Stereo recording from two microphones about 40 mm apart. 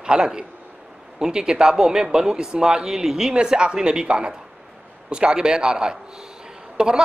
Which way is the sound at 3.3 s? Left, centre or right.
Right.